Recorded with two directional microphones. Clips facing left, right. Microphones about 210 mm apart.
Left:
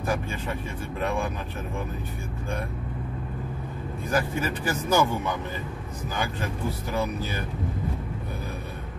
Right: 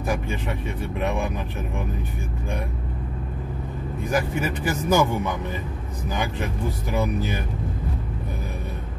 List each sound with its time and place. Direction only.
0.0 s speech: 15° right (ahead or behind)
4.1 s speech: 15° right (ahead or behind)
6.9 s speech: 15° right (ahead or behind)